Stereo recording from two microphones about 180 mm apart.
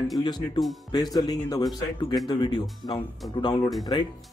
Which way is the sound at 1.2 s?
20° left (ahead or behind).